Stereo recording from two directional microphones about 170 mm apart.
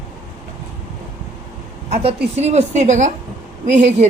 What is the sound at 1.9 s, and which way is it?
A woman's voice, 40° right (ahead or behind).